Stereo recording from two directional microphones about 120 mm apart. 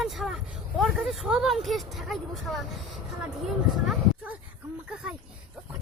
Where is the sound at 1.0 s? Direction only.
5° right (ahead or behind).